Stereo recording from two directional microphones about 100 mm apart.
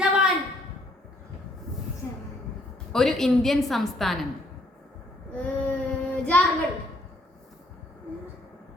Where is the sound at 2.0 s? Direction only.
25° left (ahead or behind).